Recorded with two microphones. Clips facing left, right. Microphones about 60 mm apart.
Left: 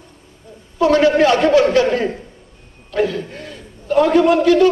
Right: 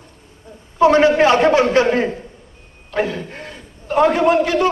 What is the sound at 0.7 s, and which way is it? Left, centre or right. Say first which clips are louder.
A man's voice: right 1 dB; right.